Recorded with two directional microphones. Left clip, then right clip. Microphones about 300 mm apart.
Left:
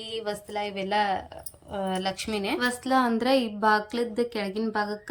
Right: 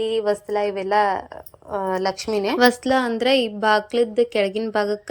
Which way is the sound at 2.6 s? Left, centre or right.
Centre.